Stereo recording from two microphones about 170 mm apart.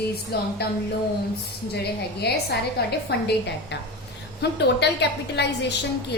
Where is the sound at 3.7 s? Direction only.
90° left.